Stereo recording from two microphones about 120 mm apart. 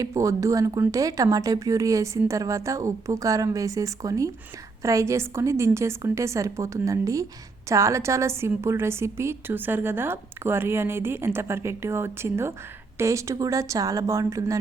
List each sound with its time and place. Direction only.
0.0 s a woman's voice: 25° right (ahead or behind)